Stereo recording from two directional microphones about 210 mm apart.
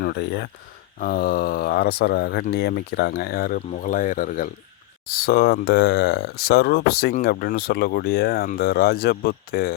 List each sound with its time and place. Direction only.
0.0 s speech: 50° left (ahead or behind)